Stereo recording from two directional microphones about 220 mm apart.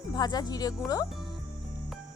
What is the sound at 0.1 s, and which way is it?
Speech, 20° left (ahead or behind).